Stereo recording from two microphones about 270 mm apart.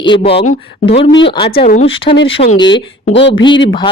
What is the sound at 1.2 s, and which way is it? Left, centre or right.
Speech, centre.